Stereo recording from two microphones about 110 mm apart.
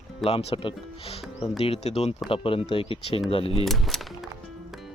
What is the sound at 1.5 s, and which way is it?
Speech, 65° left (ahead or behind).